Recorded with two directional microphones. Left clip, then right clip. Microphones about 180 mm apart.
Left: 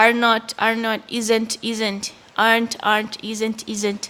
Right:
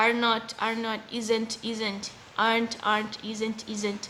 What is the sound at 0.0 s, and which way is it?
A woman's voice, 50° left (ahead or behind).